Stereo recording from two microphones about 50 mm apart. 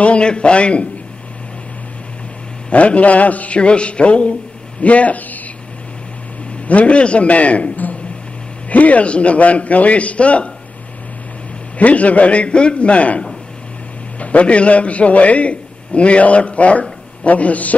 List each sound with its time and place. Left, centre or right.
0.0 s a man's voice: left
2.7 s a man's voice: left
6.7 s a man's voice: left
11.8 s a man's voice: left
14.2 s a man's voice: left